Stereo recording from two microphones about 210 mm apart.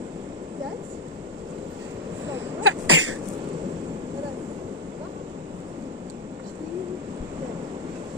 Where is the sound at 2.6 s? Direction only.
70° right (ahead or behind).